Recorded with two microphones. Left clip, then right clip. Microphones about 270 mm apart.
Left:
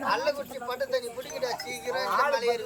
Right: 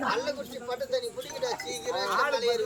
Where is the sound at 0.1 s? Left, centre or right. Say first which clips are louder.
Left 3 dB; centre.